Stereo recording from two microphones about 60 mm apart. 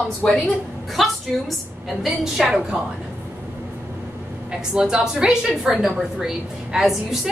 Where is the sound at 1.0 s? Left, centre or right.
Centre.